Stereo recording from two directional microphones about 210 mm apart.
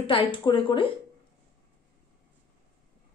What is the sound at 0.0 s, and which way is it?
Speech, 25° left (ahead or behind).